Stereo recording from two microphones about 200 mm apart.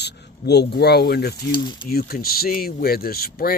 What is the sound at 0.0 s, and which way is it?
Speech, 55° left (ahead or behind).